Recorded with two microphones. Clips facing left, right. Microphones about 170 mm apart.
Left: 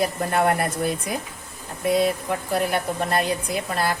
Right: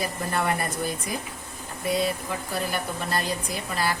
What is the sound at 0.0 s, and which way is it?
Speech, 60° left (ahead or behind).